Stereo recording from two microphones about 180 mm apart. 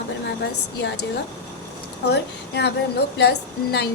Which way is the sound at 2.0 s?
65° left (ahead or behind).